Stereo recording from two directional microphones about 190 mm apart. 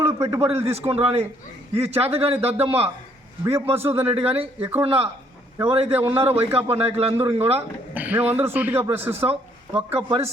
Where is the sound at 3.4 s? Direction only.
10° right (ahead or behind).